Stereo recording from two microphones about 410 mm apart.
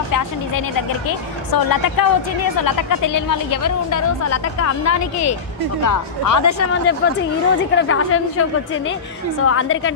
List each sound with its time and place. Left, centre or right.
1.5 s a woman's voice: left
7.7 s a woman's voice: left